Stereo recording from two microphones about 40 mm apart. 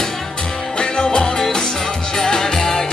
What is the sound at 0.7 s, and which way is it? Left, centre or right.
Music, left.